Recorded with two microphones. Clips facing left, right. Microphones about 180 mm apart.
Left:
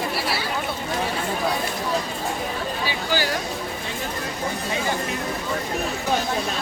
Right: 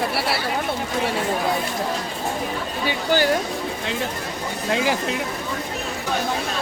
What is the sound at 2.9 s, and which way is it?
Speech, 55° right (ahead or behind).